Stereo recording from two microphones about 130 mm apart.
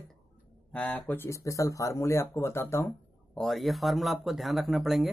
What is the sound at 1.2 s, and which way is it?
Speech, 25° left (ahead or behind).